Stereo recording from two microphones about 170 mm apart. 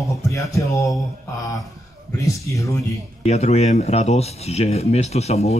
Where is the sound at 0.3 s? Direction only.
20° left (ahead or behind).